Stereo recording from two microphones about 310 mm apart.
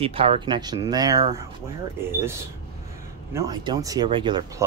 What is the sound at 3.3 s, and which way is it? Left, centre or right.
Speech, centre.